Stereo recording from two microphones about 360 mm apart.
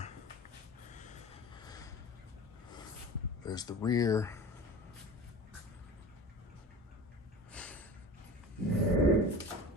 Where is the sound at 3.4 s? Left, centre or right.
Centre.